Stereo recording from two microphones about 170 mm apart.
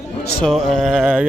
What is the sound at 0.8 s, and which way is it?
Carnatic music, 5° right (ahead or behind).